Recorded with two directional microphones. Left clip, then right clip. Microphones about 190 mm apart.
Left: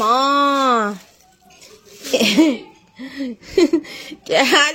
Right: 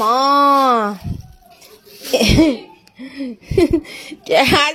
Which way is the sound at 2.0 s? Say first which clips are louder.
Right 1 dB; centre (ahead or behind).